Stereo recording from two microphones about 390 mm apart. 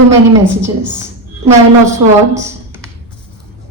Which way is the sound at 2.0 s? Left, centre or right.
Right.